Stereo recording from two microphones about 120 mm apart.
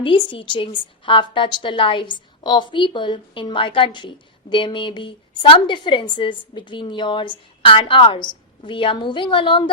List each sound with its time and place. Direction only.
0.0 s a woman's voice: 45° left (ahead or behind)